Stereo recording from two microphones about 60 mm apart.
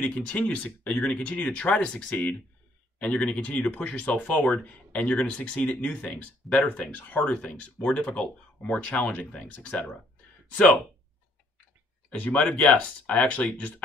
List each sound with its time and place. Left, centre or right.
0.0 s speech: left
12.1 s speech: left